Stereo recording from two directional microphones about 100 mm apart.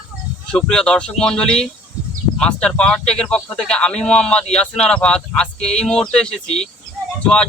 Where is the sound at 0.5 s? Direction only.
5° left (ahead or behind).